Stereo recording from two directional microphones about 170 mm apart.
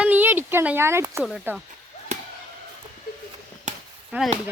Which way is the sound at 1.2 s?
Centre (ahead or behind).